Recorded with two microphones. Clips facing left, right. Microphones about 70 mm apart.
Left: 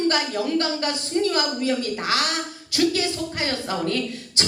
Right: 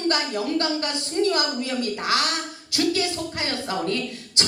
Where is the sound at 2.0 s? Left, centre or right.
Left.